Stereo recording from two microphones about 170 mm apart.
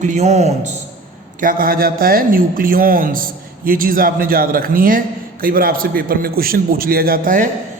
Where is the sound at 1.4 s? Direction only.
55° right (ahead or behind).